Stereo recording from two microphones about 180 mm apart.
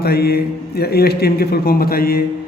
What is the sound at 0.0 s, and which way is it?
A man's voice, 60° left (ahead or behind).